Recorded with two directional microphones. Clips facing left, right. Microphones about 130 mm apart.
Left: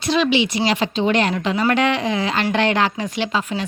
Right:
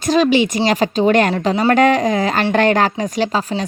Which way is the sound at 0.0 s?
45° right (ahead or behind).